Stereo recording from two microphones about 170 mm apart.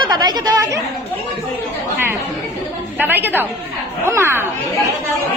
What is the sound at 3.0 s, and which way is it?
A woman's voice, 10° right (ahead or behind).